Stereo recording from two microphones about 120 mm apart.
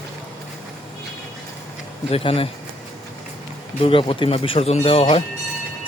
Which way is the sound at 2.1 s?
55° left (ahead or behind).